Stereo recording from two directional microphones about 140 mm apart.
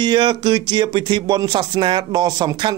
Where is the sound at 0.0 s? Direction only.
35° right (ahead or behind).